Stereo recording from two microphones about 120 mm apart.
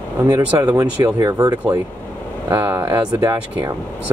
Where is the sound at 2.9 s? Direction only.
30° right (ahead or behind).